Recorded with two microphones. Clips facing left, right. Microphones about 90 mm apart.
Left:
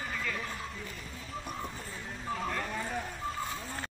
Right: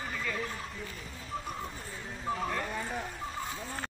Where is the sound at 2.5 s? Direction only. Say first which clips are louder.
Right 1 dB; 5° right (ahead or behind).